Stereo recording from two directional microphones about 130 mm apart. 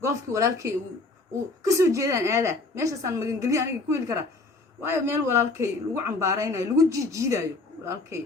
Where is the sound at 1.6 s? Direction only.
25° right (ahead or behind).